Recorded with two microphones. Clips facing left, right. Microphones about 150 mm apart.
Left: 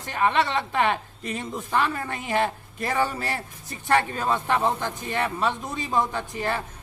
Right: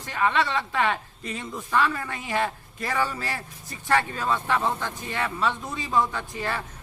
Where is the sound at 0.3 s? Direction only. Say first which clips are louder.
Left 1 dB; 25° left (ahead or behind).